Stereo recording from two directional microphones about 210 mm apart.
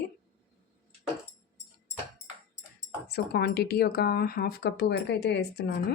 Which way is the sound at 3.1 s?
50° left (ahead or behind).